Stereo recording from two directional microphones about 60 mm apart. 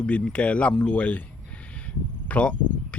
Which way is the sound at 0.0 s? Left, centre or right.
Centre.